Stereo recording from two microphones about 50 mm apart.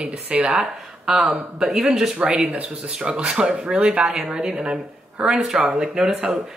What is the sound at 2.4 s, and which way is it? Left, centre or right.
Speech, centre.